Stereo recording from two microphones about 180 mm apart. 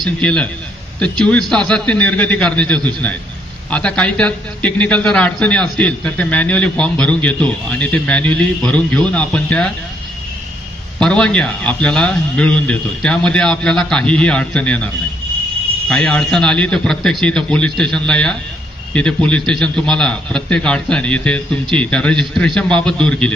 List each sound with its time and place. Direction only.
0.0 s a man's voice: 5° left (ahead or behind)
11.0 s a man's voice: 5° left (ahead or behind)
15.9 s a man's voice: 5° left (ahead or behind)